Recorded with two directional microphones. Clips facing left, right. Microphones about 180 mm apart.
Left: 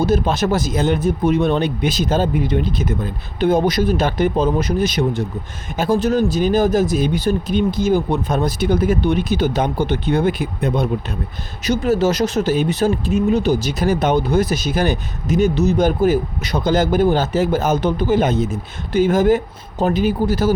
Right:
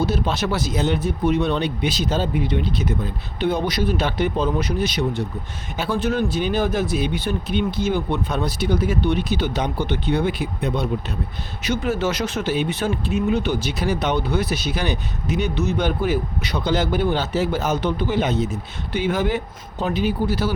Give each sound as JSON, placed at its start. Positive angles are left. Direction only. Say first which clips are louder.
{"t": 0.0, "sound": "speech", "louder": "left 5 dB", "side_deg": 50}
{"t": 11.6, "sound": "speech", "louder": "left 6 dB", "side_deg": 40}